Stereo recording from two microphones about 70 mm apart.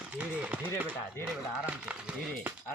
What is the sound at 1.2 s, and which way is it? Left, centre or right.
Speech, centre.